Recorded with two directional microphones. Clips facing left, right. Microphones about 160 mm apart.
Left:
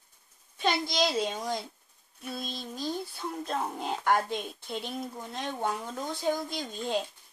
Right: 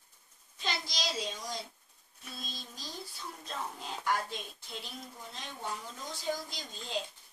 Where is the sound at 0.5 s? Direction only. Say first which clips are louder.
Left 10 dB; 55° left (ahead or behind).